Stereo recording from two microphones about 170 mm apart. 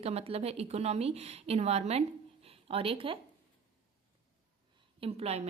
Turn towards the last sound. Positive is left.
turn(degrees=-35)  # may be behind; listen again after turning